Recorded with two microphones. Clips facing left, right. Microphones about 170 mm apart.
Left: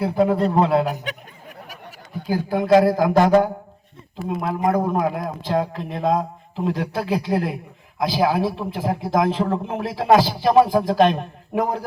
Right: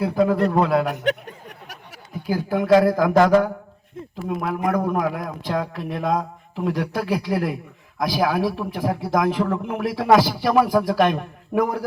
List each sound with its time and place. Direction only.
0.0 s a man's voice: 25° left (ahead or behind)
2.2 s a man's voice: 20° left (ahead or behind)